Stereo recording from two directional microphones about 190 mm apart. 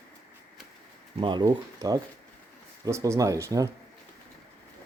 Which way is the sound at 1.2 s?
25° right (ahead or behind).